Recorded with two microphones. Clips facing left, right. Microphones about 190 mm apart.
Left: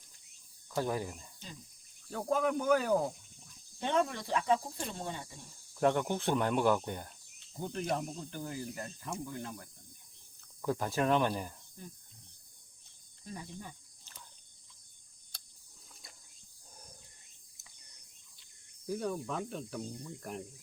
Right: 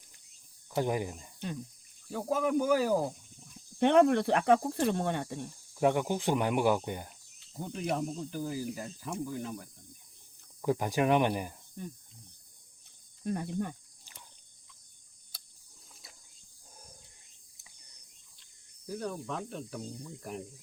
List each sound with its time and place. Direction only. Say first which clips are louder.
0.8 s speech: right 3 dB; 15° right (ahead or behind)
2.0 s speech: right 1 dB; 5° right (ahead or behind)
3.8 s speech: right 9 dB; 65° right (ahead or behind)
5.7 s speech: right 2 dB; 10° right (ahead or behind)
13.2 s speech: right 12 dB; 60° right (ahead or behind)
14.0 s a sound: even; 15° right (ahead or behind)
18.9 s speech: left 1 dB; 5° left (ahead or behind)